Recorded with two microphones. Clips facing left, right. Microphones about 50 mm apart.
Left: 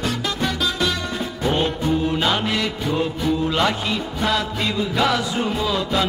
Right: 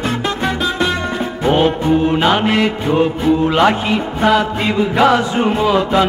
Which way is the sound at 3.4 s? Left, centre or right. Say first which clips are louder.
Right 8 dB; right.